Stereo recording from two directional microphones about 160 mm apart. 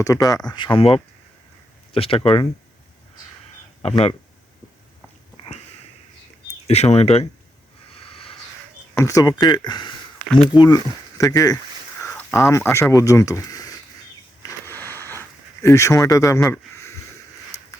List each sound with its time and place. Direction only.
0.0 s speech: 20° left (ahead or behind)
3.8 s speech: 40° left (ahead or behind)
6.7 s speech: 40° left (ahead or behind)
9.0 s speech: 20° left (ahead or behind)
10.2 s speech: 5° left (ahead or behind)
10.5 s speech: 25° left (ahead or behind)
14.4 s a sound: 15° left (ahead or behind)
15.6 s speech: 20° left (ahead or behind)
16.5 s a sound: 15° left (ahead or behind)